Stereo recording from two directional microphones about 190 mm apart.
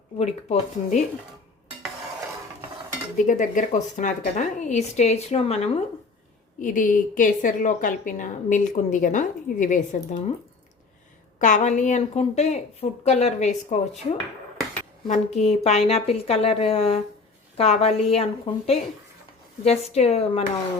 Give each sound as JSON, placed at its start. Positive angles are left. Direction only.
{"t": 0.2, "sound": "a woman's voice", "side_deg": 35}
{"t": 3.2, "sound": "a woman's voice", "side_deg": 40}
{"t": 6.6, "sound": "a woman's voice", "side_deg": 45}
{"t": 11.3, "sound": "a woman's voice", "side_deg": 40}
{"t": 15.1, "sound": "a woman's voice", "side_deg": 35}